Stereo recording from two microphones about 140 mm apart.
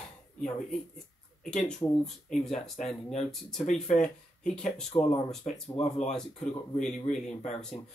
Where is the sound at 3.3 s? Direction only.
Centre (ahead or behind).